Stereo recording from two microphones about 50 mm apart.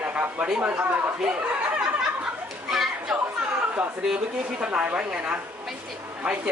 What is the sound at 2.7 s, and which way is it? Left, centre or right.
Chatter, centre.